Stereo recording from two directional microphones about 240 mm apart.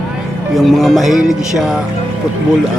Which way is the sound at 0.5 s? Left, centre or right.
Centre.